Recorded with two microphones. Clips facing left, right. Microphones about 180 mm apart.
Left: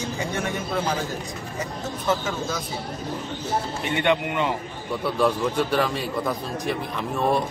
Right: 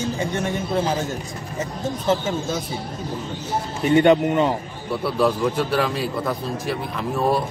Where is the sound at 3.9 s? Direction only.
40° right (ahead or behind).